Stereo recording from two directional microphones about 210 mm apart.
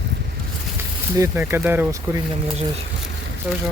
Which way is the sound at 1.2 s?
10° right (ahead or behind).